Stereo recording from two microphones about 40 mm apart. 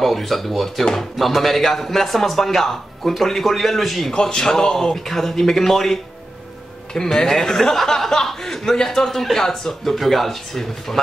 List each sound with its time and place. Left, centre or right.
0.0 s a man's voice: centre
4.1 s speech: centre